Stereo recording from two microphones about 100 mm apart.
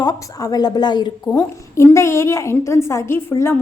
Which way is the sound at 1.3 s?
25° left (ahead or behind).